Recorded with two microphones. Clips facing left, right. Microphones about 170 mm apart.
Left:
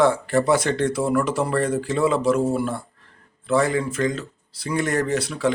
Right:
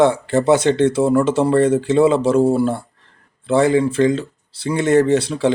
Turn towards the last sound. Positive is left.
turn(degrees=-25)  # may be behind; listen again after turning